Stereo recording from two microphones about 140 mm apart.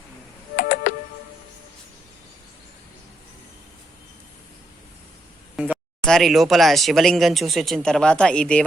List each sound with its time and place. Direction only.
0.5 s music: 80° left
6.1 s speech: centre (ahead or behind)